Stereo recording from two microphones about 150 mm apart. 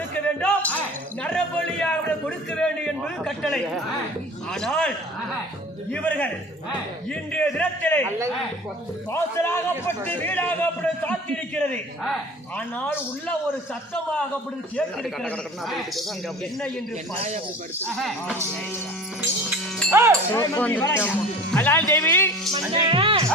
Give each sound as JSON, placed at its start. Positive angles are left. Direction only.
{"t": 0.1, "sound": "a sound", "side_deg": 10}
{"t": 1.2, "sound": "a man's voice", "side_deg": 5}
{"t": 5.9, "sound": "a man's voice", "side_deg": 10}
{"t": 9.1, "sound": "a man's voice", "side_deg": 15}
{"t": 14.8, "sound": "a man's voice", "side_deg": 5}
{"t": 17.2, "sound": "speech", "side_deg": -50}
{"t": 17.9, "sound": "a man's voice", "side_deg": 0}
{"t": 19.9, "sound": "speech", "side_deg": -20}
{"t": 20.3, "sound": "a man's voice", "side_deg": 15}
{"t": 22.9, "sound": "speech", "side_deg": -35}